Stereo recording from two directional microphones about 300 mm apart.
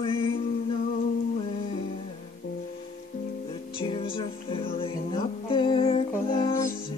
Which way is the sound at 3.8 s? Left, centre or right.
Centre.